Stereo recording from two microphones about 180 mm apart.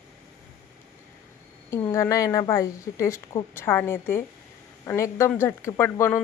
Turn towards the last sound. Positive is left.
turn(degrees=15)  # may be behind; listen again after turning